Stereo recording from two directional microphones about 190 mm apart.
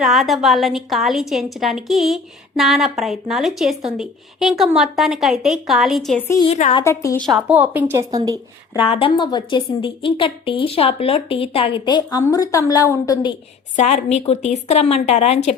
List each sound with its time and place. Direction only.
0.0 s a woman's voice: centre (ahead or behind)
6.2 s a woman's voice: 20° left (ahead or behind)
6.5 s a woman's voice: 35° left (ahead or behind)
6.8 s a woman's voice: 15° left (ahead or behind)
7.3 s a woman's voice: 10° right (ahead or behind)
8.8 s a woman's voice: 30° left (ahead or behind)
13.7 s a woman's voice: 35° left (ahead or behind)